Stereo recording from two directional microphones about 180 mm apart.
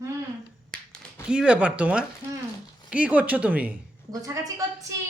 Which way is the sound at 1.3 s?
5° right (ahead or behind).